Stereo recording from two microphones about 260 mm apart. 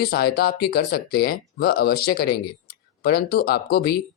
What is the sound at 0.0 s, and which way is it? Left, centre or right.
Speech, left.